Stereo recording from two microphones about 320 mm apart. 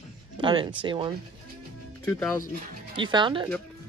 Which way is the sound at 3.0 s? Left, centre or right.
Centre.